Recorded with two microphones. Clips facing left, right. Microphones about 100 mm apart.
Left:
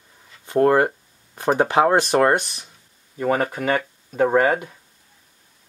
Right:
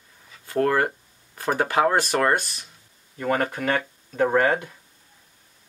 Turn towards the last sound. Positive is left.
turn(degrees=10)  # may be behind; listen again after turning